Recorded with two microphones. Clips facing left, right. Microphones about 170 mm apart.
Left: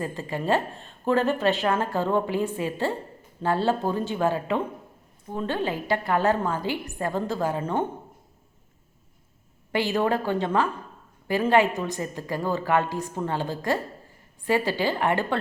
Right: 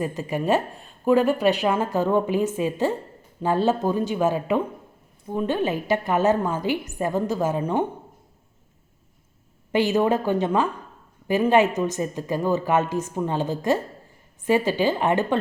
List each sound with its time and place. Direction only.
0.0 s a woman's voice: 15° right (ahead or behind)
9.7 s a woman's voice: 20° right (ahead or behind)